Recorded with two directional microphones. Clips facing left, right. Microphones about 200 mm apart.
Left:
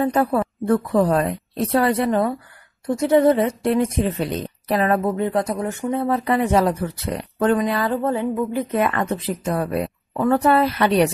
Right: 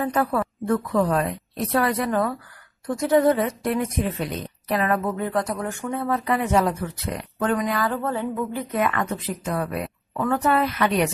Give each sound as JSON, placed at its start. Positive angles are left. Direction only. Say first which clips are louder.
{"t": 0.0, "sound": "speech", "louder": "left 4 dB", "side_deg": 25}
{"t": 8.7, "sound": "a woman's voice", "louder": "left 2 dB", "side_deg": 30}